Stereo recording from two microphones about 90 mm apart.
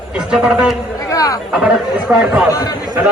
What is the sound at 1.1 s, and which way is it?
Speech, 40° left (ahead or behind).